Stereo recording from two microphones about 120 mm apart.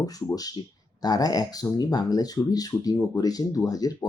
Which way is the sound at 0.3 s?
30° left (ahead or behind).